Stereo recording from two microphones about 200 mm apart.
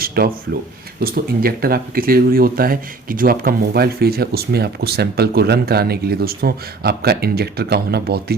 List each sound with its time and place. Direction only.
0.2 s speech: 50° right (ahead or behind)